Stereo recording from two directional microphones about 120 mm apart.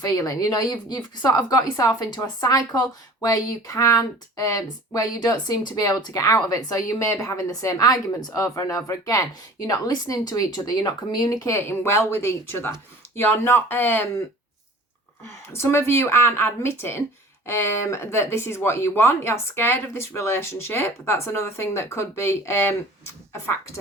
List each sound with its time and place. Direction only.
0.0 s speech: 30° left (ahead or behind)
15.2 s speech: 25° left (ahead or behind)